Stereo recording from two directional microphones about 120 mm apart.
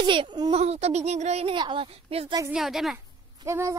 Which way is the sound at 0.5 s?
60° right (ahead or behind).